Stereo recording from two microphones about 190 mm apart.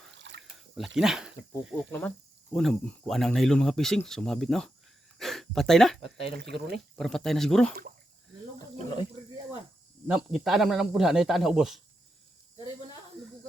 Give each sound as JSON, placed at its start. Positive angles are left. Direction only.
{"t": 0.1, "sound": "a sound", "side_deg": -70}
{"t": 0.9, "sound": "speech", "side_deg": -5}
{"t": 1.9, "sound": "speech", "side_deg": 10}
{"t": 6.4, "sound": "speech", "side_deg": -65}
{"t": 6.9, "sound": "speech", "side_deg": 0}
{"t": 10.1, "sound": "speech", "side_deg": -5}